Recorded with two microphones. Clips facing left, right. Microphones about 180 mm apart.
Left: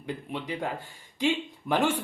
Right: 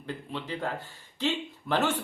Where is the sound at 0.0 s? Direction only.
15° left (ahead or behind).